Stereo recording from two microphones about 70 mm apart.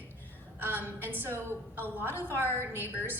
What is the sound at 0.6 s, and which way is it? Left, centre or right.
A woman's voice, right.